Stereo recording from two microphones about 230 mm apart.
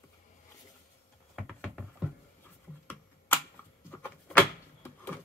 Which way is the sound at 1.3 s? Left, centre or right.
Centre.